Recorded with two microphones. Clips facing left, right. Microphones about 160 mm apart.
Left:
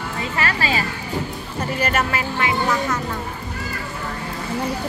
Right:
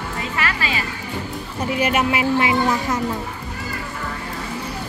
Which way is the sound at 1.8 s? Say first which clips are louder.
Right 3 dB; 10° right (ahead or behind).